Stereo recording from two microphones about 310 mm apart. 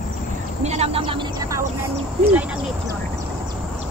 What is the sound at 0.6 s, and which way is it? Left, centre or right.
Speech, right.